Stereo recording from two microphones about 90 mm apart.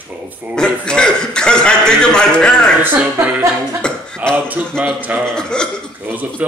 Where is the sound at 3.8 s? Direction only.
10° left (ahead or behind).